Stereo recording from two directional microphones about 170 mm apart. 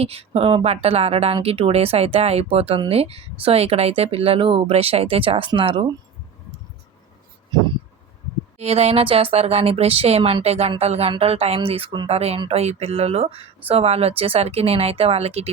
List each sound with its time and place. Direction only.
0.0 s speech: 35° right (ahead or behind)
8.5 s speech: 40° right (ahead or behind)